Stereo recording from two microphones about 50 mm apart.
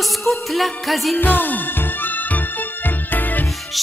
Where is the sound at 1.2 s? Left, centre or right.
Left.